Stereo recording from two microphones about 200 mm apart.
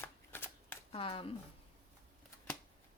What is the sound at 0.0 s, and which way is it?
Shuffling cards, 10° left (ahead or behind).